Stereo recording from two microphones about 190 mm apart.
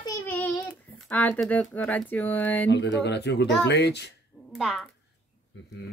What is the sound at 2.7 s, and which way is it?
Speech, 65° left (ahead or behind).